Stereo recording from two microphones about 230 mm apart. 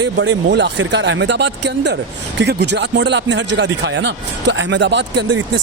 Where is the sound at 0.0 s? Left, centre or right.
Right.